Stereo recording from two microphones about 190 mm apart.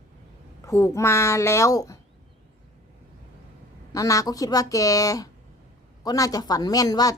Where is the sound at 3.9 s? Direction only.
15° left (ahead or behind).